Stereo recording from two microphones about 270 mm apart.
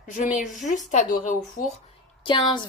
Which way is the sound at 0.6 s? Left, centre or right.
Left.